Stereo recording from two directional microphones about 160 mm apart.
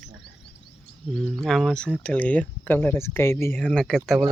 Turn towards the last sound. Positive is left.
turn(degrees=0)  # may be behind; listen again after turning